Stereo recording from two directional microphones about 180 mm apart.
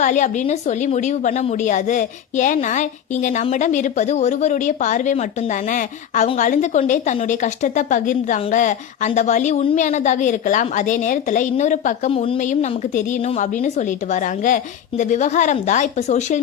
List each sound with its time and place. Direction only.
0.0 s a woman's voice: 45° left (ahead or behind)
12.4 s a woman's voice: 45° left (ahead or behind)